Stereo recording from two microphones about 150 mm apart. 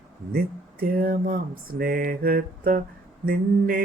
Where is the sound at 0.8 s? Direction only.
75° right (ahead or behind).